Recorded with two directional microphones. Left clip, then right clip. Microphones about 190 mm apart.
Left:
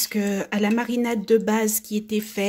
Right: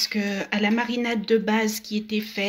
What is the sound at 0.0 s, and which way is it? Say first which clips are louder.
Speech: even; 45° left (ahead or behind).